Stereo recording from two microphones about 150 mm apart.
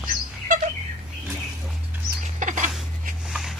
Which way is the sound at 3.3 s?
Centre (ahead or behind).